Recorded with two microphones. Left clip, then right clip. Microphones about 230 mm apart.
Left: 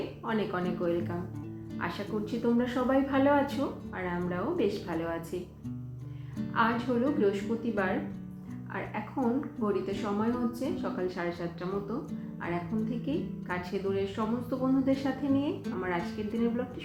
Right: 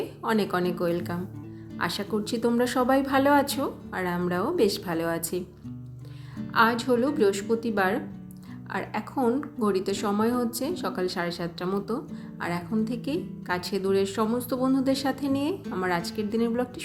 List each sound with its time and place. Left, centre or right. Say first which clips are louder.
0.3 s a woman's voice: right 6 dB; right
6.5 s a woman's voice: right 6 dB; right